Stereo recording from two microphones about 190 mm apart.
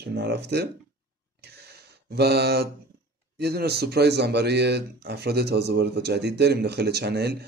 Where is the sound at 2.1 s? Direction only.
60° right (ahead or behind).